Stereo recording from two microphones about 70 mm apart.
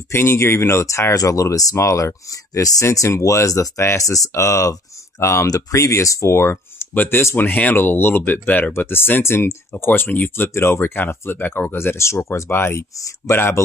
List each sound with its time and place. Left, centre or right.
0.1 s speech: left
1.1 s speech: left
6.9 s speech: left
9.8 s speech: left
10.5 s speech: left